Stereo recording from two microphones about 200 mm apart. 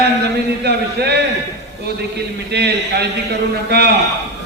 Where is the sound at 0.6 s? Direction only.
55° right (ahead or behind).